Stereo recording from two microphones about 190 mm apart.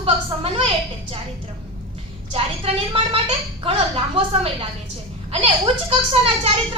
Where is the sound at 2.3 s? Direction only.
30° right (ahead or behind).